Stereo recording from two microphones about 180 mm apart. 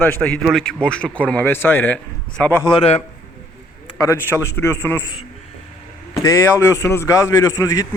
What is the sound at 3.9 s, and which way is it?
A man's voice, 20° left (ahead or behind).